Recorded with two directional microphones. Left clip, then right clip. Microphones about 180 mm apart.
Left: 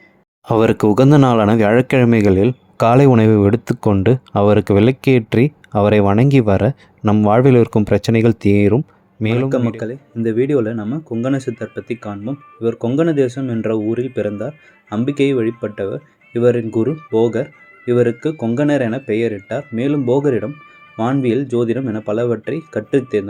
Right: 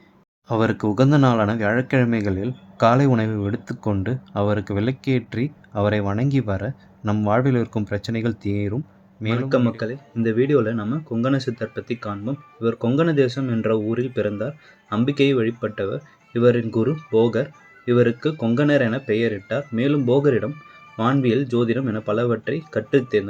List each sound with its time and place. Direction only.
0.4 s speech: 45° left (ahead or behind)
9.8 s speech: 20° left (ahead or behind)